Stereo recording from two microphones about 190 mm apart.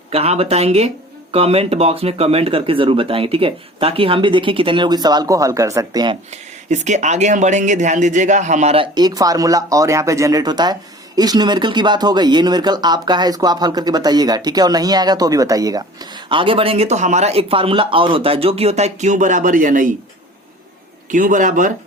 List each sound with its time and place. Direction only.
0.1 s speech: 30° right (ahead or behind)
6.3 s speech: 40° right (ahead or behind)
21.1 s a man's voice: 45° right (ahead or behind)